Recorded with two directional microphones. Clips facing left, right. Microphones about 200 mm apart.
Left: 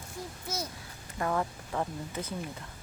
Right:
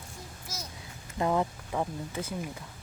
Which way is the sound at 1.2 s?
15° right (ahead or behind).